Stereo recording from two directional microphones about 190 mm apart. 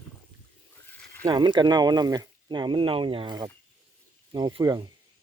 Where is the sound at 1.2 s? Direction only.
20° right (ahead or behind).